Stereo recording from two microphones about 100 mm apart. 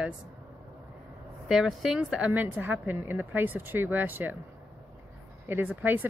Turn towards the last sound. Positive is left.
turn(degrees=-15)  # may be behind; listen again after turning